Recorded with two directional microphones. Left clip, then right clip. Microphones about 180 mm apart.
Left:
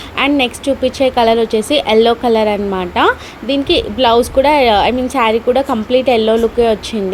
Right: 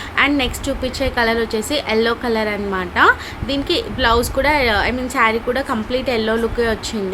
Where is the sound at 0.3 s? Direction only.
25° left (ahead or behind).